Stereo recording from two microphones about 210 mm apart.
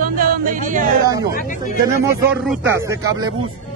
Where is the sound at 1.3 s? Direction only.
40° left (ahead or behind).